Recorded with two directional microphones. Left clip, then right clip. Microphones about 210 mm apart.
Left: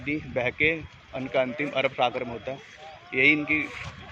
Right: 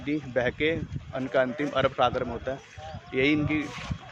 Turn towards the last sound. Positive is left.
turn(degrees=-20)  # may be behind; listen again after turning